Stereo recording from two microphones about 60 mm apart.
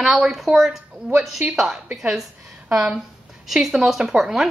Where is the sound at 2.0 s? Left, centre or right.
Centre.